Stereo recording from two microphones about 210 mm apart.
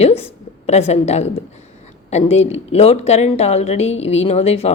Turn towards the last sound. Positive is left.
turn(degrees=30)  # may be behind; listen again after turning